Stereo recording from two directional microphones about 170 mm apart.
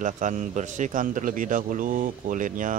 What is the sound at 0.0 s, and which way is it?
A man's voice, 50° right (ahead or behind).